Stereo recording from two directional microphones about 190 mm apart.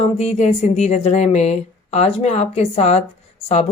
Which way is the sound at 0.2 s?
35° left (ahead or behind).